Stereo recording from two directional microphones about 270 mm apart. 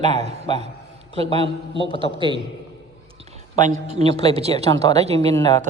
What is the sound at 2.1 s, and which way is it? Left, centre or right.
Speech, centre.